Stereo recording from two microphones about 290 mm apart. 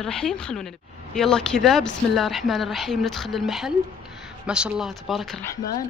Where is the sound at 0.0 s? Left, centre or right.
Centre.